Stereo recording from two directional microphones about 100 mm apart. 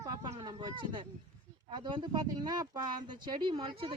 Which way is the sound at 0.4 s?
50° right (ahead or behind).